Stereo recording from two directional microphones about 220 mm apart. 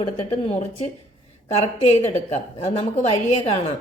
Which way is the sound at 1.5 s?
30° left (ahead or behind).